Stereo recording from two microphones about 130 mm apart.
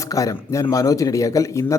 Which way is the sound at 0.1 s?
25° left (ahead or behind).